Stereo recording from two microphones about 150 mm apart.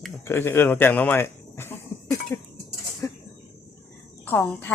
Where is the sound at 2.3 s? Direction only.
15° left (ahead or behind).